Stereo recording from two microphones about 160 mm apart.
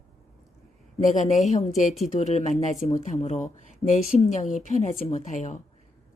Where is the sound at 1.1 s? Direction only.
45° left (ahead or behind).